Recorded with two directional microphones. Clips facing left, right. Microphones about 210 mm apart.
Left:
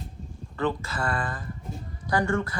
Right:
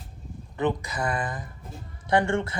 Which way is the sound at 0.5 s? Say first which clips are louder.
Right 1 dB; 20° right (ahead or behind).